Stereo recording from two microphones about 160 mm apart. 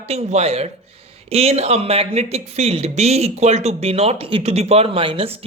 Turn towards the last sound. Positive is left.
turn(degrees=-35)  # may be behind; listen again after turning